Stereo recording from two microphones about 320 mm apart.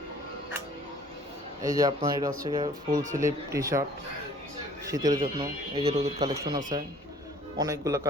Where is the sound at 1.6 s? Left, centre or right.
Centre.